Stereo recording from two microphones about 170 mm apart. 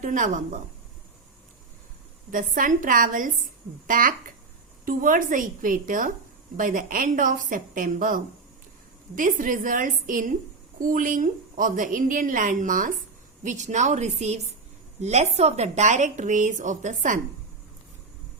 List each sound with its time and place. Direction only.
0.0 s a woman's voice: 50° right (ahead or behind)
2.3 s a woman's voice: 55° right (ahead or behind)